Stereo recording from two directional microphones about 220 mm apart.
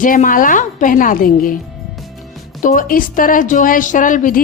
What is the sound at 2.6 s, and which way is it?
A woman's voice, 40° left (ahead or behind).